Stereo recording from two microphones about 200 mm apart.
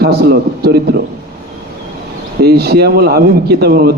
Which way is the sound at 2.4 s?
50° right (ahead or behind).